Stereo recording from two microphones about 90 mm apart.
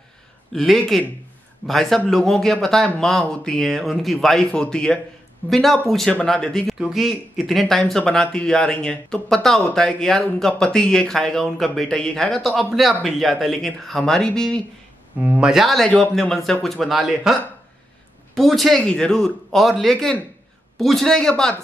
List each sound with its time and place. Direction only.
0.5 s speech: 5° left (ahead or behind)
15.1 s speech: 15° right (ahead or behind)
15.5 s speech: centre (ahead or behind)